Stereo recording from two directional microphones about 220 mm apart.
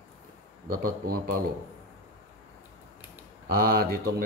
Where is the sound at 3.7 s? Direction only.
45° right (ahead or behind).